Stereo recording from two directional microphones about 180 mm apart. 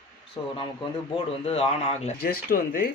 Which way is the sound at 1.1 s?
35° left (ahead or behind).